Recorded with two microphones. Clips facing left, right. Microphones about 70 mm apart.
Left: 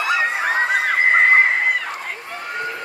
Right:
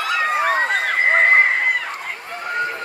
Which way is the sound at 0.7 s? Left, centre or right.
Centre.